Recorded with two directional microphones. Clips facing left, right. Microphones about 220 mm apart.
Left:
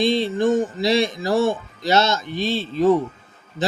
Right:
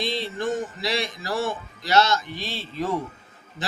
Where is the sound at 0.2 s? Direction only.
25° left (ahead or behind).